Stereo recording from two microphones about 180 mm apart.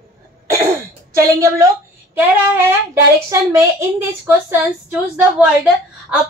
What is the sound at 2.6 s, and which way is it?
A woman's voice, 15° right (ahead or behind).